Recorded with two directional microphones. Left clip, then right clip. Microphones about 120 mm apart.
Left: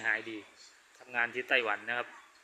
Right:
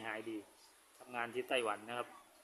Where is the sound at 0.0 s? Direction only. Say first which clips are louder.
Left 11 dB; 15° right (ahead or behind).